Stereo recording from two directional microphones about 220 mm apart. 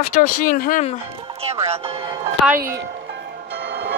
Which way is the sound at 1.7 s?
25° right (ahead or behind).